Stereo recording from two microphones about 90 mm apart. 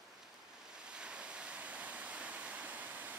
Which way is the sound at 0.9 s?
10° right (ahead or behind).